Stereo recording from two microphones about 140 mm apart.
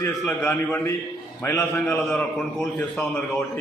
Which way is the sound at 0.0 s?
15° left (ahead or behind).